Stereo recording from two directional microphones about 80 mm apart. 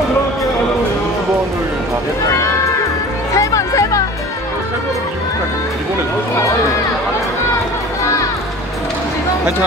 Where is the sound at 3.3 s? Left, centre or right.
Left.